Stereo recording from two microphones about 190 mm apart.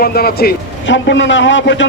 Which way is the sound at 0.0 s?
50° left (ahead or behind).